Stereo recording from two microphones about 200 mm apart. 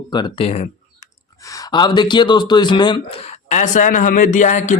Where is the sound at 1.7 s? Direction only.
20° left (ahead or behind).